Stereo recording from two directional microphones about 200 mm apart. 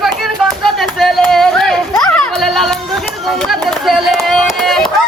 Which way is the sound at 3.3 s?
Centre (ahead or behind).